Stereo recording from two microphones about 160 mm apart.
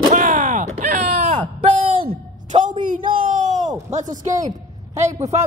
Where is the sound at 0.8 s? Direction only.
55° right (ahead or behind).